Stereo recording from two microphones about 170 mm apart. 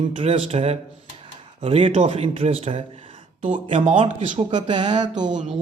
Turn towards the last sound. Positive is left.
turn(degrees=-45)  # may be behind; listen again after turning